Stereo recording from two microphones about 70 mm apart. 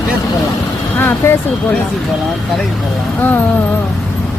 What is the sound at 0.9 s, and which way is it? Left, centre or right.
Speech, left.